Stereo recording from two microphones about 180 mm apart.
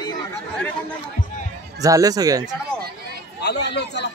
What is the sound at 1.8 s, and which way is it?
Speech, 20° right (ahead or behind).